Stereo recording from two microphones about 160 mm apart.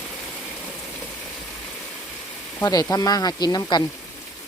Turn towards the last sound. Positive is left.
turn(degrees=25)  # may be behind; listen again after turning